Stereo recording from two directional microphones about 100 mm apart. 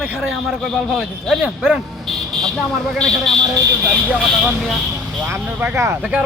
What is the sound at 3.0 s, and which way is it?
Speech, 5° left (ahead or behind).